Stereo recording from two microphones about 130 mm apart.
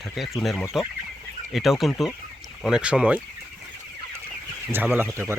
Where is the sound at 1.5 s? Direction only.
Centre (ahead or behind).